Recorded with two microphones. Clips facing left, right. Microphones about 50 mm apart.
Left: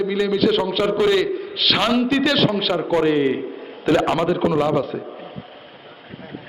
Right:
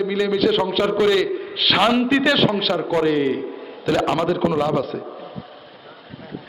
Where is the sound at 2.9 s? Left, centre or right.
Centre.